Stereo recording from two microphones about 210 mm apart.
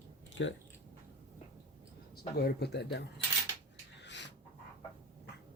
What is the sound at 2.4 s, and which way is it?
Speech, 50° left (ahead or behind).